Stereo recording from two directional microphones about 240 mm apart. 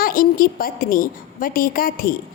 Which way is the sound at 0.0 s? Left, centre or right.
Left.